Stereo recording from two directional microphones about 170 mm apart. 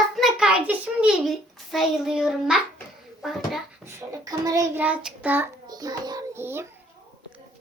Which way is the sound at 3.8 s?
15° right (ahead or behind).